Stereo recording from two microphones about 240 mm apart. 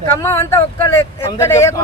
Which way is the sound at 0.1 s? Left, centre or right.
Centre.